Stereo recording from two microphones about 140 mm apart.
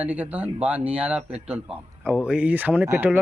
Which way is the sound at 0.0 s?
10° right (ahead or behind).